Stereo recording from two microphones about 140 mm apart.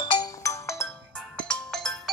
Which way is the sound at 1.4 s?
5° left (ahead or behind).